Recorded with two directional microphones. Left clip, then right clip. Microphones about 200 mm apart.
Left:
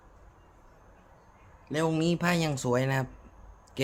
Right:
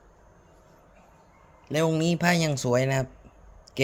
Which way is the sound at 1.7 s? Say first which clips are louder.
Right 3 dB; 25° right (ahead or behind).